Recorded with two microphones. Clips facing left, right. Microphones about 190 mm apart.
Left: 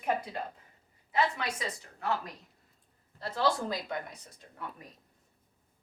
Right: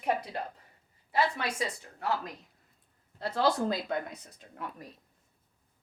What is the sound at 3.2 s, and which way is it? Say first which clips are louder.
Speech: right 2 dB; 60° right (ahead or behind).